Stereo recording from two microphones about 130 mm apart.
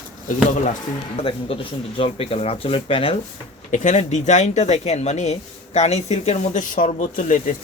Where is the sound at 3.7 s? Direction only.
65° left (ahead or behind).